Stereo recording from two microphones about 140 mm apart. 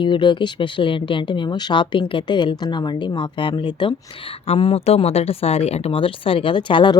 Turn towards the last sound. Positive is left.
turn(degrees=35)  # may be behind; listen again after turning